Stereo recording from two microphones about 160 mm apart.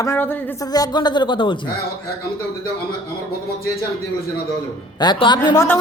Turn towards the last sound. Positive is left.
turn(degrees=25)  # may be behind; listen again after turning